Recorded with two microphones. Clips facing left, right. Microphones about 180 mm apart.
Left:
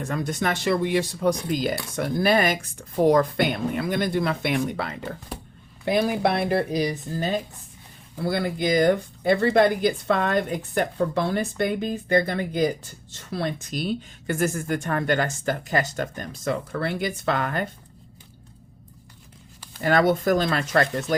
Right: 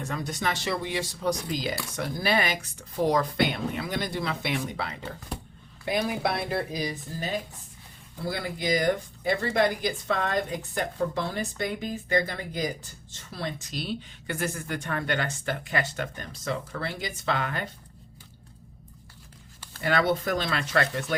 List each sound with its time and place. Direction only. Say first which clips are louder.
0.0 s speech: left 4 dB; 50° left (ahead or behind)
19.8 s speech: left 5 dB; 45° left (ahead or behind)